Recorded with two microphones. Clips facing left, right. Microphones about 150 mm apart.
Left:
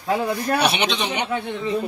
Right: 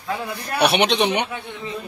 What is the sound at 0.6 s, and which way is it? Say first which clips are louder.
Speech: right 4 dB; 60° right (ahead or behind).